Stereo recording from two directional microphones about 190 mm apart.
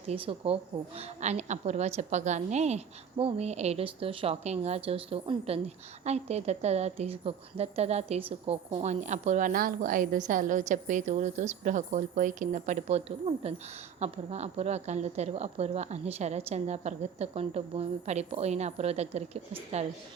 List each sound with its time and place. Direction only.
0.1 s a woman's voice: 30° right (ahead or behind)